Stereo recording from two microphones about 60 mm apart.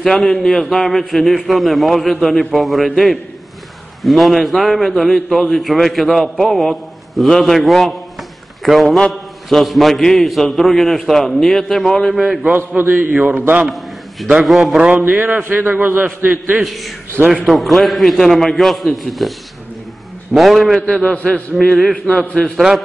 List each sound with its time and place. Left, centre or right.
0.0 s a man's voice: centre
4.0 s a man's voice: centre
12.4 s a man's voice: right
13.7 s a sound: centre
14.4 s a man's voice: centre
14.8 s a man's voice: right
16.6 s a man's voice: centre
20.8 s a man's voice: centre